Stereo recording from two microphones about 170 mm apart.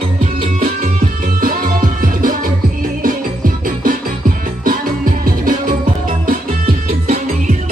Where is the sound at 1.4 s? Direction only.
50° right (ahead or behind).